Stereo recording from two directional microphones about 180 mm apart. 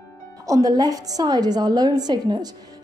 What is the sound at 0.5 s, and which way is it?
Speech, 20° right (ahead or behind).